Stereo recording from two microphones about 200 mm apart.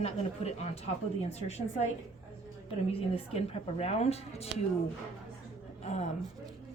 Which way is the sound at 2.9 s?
30° left (ahead or behind).